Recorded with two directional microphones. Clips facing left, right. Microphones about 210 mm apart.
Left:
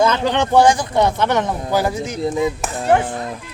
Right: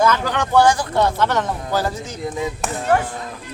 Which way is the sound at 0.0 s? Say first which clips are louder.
Left 2 dB; 25° left (ahead or behind).